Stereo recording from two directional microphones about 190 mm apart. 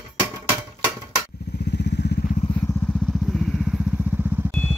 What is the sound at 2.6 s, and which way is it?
Vehicle, 10° left (ahead or behind).